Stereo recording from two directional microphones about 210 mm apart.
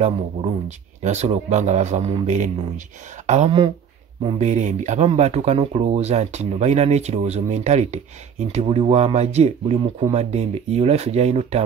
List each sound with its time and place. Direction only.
0.0 s speech: 30° right (ahead or behind)